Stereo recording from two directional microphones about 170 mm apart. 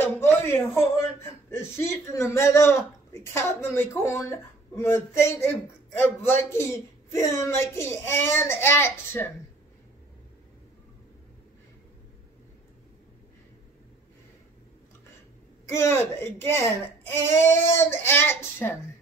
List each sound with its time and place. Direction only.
0.0 s a sound: 15° left (ahead or behind)
1.5 s a man's voice: 15° left (ahead or behind)
15.7 s a man's voice: 15° left (ahead or behind)